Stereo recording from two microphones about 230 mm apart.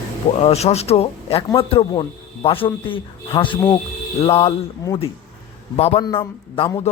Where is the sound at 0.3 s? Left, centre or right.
Left.